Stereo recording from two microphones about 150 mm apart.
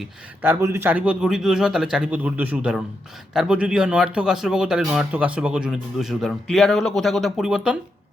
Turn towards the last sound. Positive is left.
turn(degrees=-5)  # may be behind; listen again after turning